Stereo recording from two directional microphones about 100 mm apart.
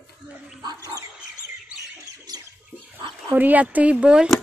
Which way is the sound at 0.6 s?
40° right (ahead or behind).